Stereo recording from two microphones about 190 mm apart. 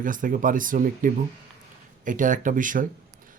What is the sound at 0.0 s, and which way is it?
Speech, 45° right (ahead or behind).